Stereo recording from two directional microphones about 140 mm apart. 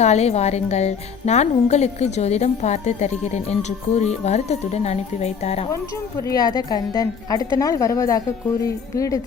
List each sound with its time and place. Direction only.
0.0 s speech: 50° left (ahead or behind)
6.2 s speech: 30° left (ahead or behind)